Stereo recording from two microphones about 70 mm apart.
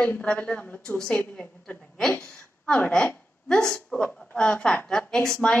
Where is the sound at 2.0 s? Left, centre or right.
Centre.